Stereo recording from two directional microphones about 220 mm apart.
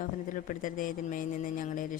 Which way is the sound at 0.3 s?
35° left (ahead or behind).